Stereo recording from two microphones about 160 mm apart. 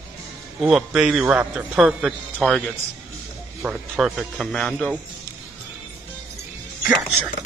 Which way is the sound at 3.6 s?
5° right (ahead or behind).